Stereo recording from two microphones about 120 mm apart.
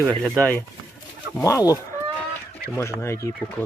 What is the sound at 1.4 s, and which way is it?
Speech, 30° left (ahead or behind).